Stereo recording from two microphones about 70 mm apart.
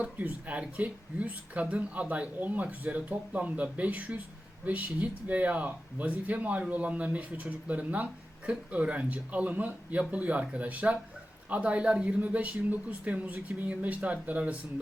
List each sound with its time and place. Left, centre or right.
0.0 s speech: right